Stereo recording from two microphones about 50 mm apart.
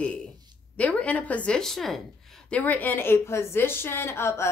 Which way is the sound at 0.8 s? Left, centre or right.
Left.